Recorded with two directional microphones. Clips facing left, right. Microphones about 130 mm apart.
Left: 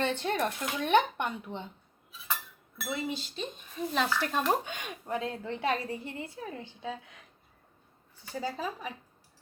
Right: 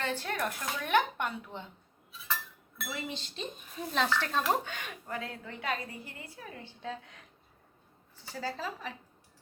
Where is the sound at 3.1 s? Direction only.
5° left (ahead or behind); by 6.6 s 25° left (ahead or behind).